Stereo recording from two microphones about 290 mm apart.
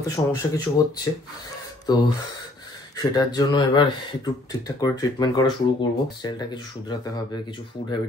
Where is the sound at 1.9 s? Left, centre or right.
Centre.